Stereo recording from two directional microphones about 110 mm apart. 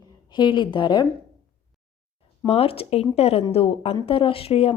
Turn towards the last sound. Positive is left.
turn(degrees=65)  # may be behind; listen again after turning